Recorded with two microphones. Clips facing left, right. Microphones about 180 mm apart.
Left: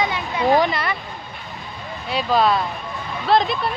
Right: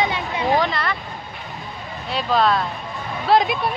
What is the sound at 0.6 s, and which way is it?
Speech, 10° left (ahead or behind).